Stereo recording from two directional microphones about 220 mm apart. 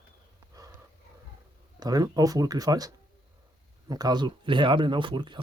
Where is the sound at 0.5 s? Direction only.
15° right (ahead or behind).